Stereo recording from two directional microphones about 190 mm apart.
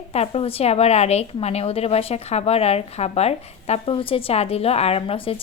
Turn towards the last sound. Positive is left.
turn(degrees=30)  # may be behind; listen again after turning